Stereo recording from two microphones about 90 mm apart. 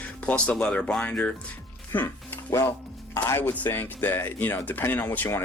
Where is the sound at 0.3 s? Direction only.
15° left (ahead or behind).